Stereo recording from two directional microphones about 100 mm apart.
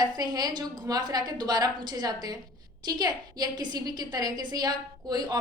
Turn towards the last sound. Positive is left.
turn(degrees=-45)  # may be behind; listen again after turning